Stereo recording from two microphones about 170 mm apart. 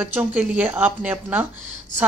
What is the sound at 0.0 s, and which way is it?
Speech, 10° right (ahead or behind).